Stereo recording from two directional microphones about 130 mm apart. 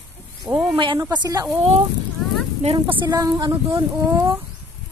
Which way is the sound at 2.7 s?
30° right (ahead or behind).